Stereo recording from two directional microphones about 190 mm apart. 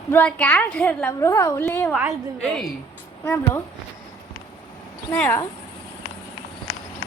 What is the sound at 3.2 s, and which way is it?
Speech, 15° left (ahead or behind).